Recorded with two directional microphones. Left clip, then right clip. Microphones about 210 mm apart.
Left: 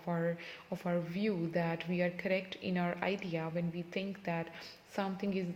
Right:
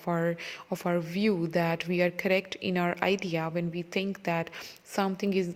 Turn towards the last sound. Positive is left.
turn(degrees=-45)  # may be behind; listen again after turning